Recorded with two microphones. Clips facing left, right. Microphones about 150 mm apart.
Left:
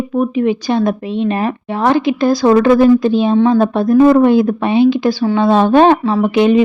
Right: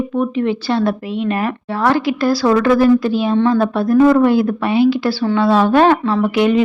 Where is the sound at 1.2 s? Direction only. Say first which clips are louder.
Left 3 dB; 25° left (ahead or behind).